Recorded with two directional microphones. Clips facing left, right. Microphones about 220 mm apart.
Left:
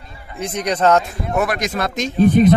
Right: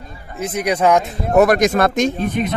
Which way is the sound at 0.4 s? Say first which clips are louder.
Right 1 dB; 5° right (ahead or behind).